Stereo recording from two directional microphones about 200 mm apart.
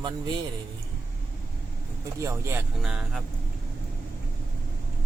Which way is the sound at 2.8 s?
Centre (ahead or behind).